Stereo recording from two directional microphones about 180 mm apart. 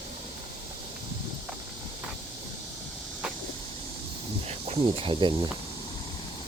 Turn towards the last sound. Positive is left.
turn(degrees=-25)  # may be behind; listen again after turning